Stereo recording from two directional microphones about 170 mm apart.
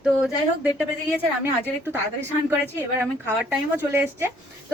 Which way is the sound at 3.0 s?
5° right (ahead or behind).